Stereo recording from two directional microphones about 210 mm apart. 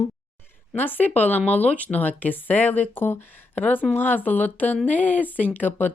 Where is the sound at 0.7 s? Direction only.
10° left (ahead or behind).